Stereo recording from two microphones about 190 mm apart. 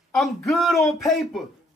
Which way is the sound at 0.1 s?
Centre (ahead or behind).